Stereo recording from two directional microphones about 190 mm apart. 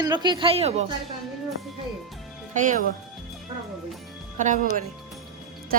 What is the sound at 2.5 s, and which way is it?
Speech, 40° right (ahead or behind).